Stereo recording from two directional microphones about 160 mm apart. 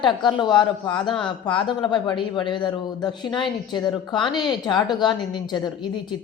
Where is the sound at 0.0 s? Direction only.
30° left (ahead or behind).